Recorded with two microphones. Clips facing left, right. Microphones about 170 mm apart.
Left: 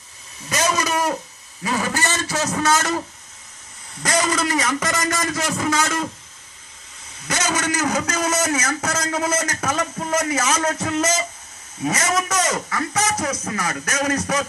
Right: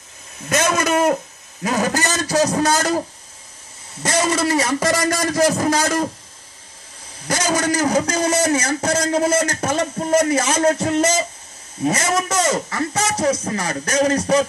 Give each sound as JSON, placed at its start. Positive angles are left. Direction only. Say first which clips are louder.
{"t": 0.5, "sound": "a sound", "louder": "right 4 dB", "side_deg": -50}
{"t": 1.6, "sound": "a man's voice", "louder": "right 3 dB", "side_deg": -45}
{"t": 4.0, "sound": "a man's voice", "louder": "right 2 dB", "side_deg": -25}
{"t": 7.2, "sound": "a man's voice", "louder": "right 4 dB", "side_deg": -30}